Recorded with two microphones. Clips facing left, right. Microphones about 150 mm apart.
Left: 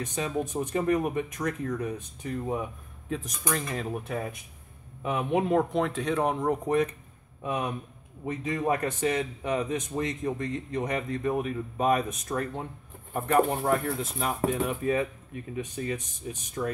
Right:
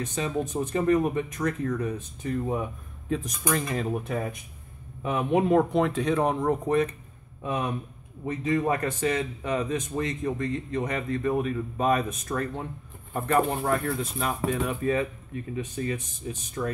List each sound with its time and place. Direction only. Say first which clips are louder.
0.0 s a man's voice: right 1 dB; 15° left (ahead or behind)
3.1 s a man's voice: right 4 dB; 5° right (ahead or behind)